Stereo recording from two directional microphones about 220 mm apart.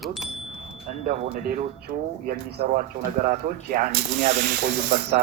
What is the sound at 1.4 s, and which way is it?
Speech, 40° right (ahead or behind).